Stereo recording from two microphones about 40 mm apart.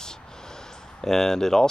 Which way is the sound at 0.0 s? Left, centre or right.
Centre.